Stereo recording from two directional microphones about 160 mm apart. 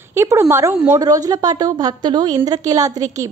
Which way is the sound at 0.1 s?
15° right (ahead or behind).